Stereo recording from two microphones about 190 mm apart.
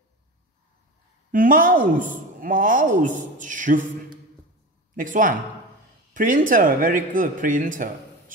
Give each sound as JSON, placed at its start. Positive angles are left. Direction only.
{"t": 1.3, "sound": "a man's voice", "side_deg": -45}
{"t": 4.9, "sound": "a man's voice", "side_deg": -45}